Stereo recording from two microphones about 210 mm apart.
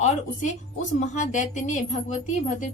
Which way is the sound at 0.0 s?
35° left (ahead or behind).